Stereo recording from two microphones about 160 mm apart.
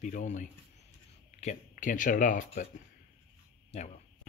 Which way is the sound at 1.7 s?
55° left (ahead or behind).